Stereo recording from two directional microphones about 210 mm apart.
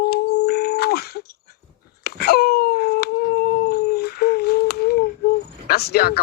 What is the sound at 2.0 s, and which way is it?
Dog, 50° left (ahead or behind).